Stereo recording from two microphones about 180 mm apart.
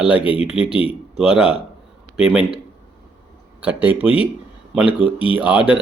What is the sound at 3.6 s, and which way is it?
Speech, 10° right (ahead or behind).